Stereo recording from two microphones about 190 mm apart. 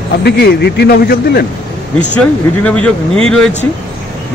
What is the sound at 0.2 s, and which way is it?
Speech, 60° left (ahead or behind).